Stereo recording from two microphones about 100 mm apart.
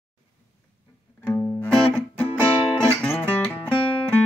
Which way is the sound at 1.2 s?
20° left (ahead or behind).